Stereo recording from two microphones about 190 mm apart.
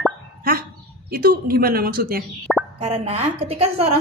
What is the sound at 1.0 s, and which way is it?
A woman's voice, 50° right (ahead or behind).